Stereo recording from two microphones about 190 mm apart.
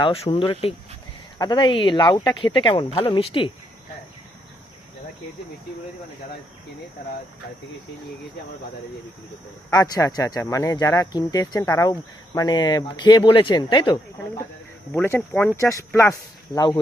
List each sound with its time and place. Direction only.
0.0 s speech: 30° left (ahead or behind)
9.6 s speech: 20° left (ahead or behind)
14.9 s speech: 10° left (ahead or behind)